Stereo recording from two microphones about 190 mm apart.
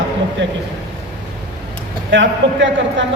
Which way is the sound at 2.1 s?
70° right (ahead or behind).